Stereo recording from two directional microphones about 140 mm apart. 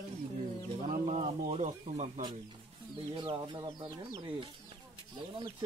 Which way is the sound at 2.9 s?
35° right (ahead or behind).